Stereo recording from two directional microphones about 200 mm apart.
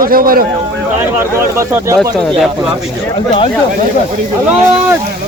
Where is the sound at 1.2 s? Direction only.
15° right (ahead or behind).